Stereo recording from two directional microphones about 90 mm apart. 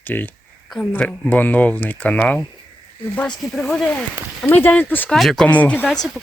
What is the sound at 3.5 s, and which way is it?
Speech, 5° left (ahead or behind).